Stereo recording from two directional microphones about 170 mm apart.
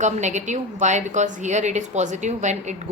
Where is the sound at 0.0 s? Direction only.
45° right (ahead or behind).